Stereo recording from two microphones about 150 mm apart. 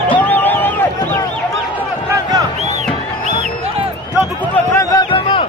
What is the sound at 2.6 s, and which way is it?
Music, 50° right (ahead or behind).